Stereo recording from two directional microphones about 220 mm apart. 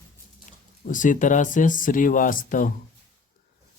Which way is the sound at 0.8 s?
35° left (ahead or behind).